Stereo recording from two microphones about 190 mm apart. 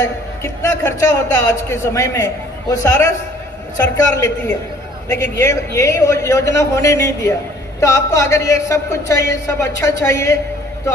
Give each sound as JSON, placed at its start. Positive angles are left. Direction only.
{"t": 0.0, "sound": "a man's voice", "side_deg": 15}